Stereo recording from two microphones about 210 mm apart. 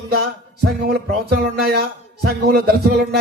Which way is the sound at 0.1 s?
50° right (ahead or behind).